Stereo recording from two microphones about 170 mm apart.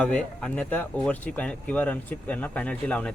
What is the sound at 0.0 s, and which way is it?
Speech, 5° left (ahead or behind).